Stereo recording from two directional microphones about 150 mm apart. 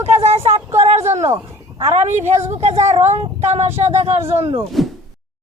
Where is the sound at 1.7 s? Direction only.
45° right (ahead or behind).